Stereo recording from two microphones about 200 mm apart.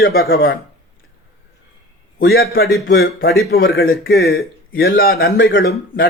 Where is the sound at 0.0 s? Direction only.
50° left (ahead or behind).